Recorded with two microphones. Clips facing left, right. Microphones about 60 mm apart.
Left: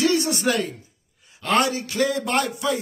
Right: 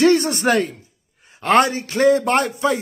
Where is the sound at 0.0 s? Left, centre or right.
Right.